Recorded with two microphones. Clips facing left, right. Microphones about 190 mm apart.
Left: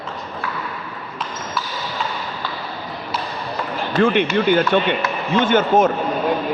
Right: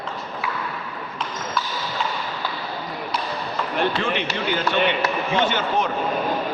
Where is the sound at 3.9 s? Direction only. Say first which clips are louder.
Left 8 dB; 55° left (ahead or behind).